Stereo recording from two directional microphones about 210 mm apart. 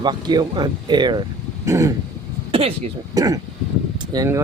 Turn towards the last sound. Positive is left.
turn(degrees=-15)  # may be behind; listen again after turning